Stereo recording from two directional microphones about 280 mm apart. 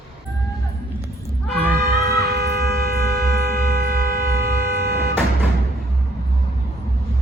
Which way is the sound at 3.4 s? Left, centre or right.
Right.